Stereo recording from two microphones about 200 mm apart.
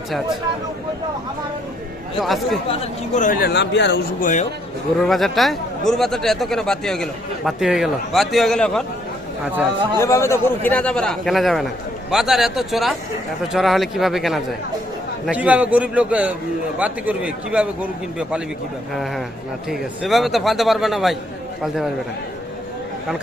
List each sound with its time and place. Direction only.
2.2 s a man's voice: centre (ahead or behind)
2.6 s speech: 35° left (ahead or behind); by 4.0 s 60° left (ahead or behind)
4.2 s speech: 40° left (ahead or behind)
4.9 s a man's voice: centre (ahead or behind)
10.0 s a man's voice: 15° left (ahead or behind); by 18.4 s 5° right (ahead or behind)
19.7 s a man's voice: centre (ahead or behind)